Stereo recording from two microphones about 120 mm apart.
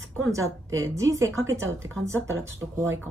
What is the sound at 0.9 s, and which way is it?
A woman's voice, 25° right (ahead or behind).